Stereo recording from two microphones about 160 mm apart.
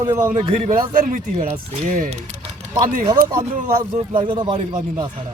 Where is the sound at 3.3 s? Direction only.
25° right (ahead or behind).